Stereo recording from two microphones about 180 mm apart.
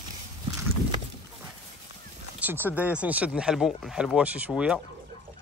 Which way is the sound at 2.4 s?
10° right (ahead or behind).